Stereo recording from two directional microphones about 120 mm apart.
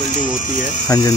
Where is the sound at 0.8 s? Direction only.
30° left (ahead or behind).